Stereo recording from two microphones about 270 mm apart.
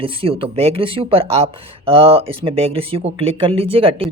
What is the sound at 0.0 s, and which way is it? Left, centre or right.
Speech, centre.